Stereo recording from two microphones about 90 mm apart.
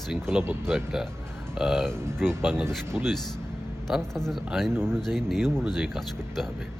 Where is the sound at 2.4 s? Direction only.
20° right (ahead or behind).